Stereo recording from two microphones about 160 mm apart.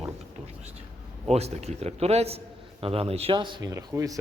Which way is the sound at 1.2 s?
40° right (ahead or behind).